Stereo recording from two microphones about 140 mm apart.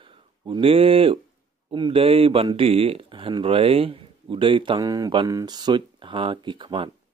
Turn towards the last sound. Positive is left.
turn(degrees=-35)  # may be behind; listen again after turning